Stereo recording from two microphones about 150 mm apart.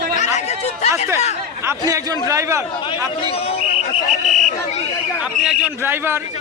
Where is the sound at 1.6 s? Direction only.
25° right (ahead or behind).